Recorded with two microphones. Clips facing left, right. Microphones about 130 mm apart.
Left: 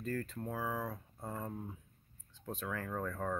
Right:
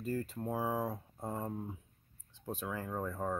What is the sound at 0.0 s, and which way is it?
Speech, 15° right (ahead or behind).